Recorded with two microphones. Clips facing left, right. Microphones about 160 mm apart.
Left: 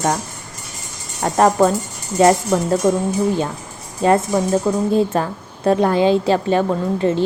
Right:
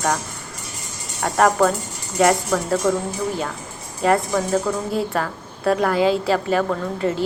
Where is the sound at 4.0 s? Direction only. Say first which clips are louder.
Left 3 dB; 25° left (ahead or behind).